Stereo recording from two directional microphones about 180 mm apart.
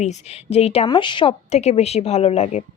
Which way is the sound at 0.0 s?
40° left (ahead or behind).